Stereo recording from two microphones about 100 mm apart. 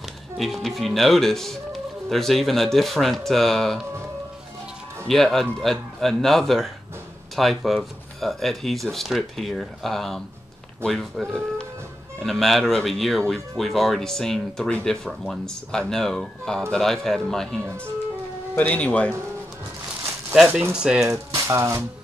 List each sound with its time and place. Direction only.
0.4 s speech: centre (ahead or behind)
5.0 s speech: 5° left (ahead or behind)
18.5 s speech: 15° left (ahead or behind)
20.3 s speech: 5° right (ahead or behind)
21.1 s speech: 30° right (ahead or behind)